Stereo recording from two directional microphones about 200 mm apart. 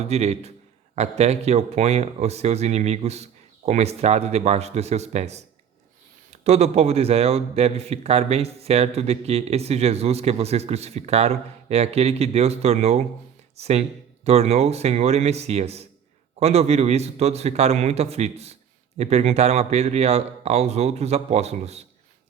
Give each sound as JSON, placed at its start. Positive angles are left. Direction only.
{"t": 0.0, "sound": "a man's voice", "side_deg": -35}